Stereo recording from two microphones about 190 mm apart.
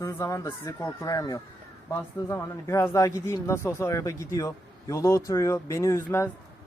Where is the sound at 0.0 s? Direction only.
15° left (ahead or behind).